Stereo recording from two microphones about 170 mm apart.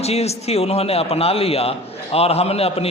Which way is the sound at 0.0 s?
40° left (ahead or behind).